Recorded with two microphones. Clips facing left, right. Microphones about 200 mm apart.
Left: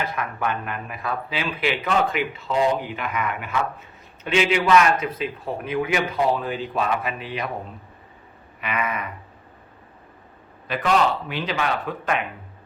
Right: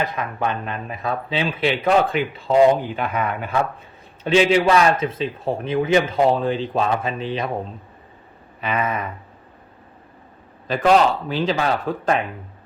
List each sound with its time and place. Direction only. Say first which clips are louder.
0.0 s a man's voice: right 3 dB; 20° right (ahead or behind)
8.6 s a man's voice: right 4 dB; 30° right (ahead or behind)
10.8 s speech: right 5 dB; 35° right (ahead or behind)